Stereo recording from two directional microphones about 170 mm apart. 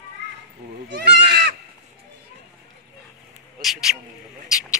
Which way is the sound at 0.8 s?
90° right.